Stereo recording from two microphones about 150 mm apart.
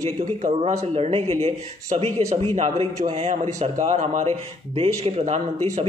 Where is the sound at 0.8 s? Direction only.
45° right (ahead or behind).